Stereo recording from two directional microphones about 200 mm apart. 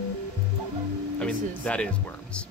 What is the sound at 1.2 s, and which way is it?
Speech, 5° left (ahead or behind).